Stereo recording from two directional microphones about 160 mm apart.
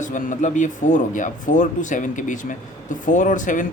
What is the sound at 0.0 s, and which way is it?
Speech, 55° left (ahead or behind).